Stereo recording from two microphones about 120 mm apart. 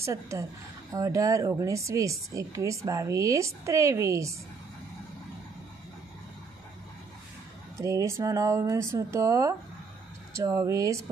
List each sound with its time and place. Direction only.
0.0 s speech: 25° right (ahead or behind)
7.8 s speech: 25° right (ahead or behind)